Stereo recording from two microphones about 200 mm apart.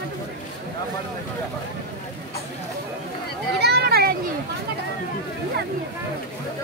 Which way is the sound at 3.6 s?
55° right (ahead or behind).